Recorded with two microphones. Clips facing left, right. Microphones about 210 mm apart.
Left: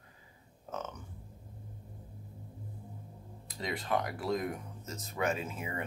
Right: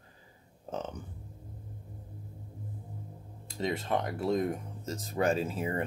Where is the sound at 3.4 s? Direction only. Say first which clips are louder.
Right 5 dB; 25° right (ahead or behind).